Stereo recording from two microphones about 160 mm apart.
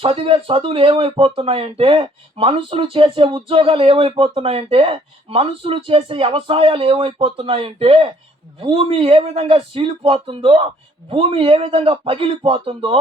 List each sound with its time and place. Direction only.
0.0 s speech: 30° right (ahead or behind)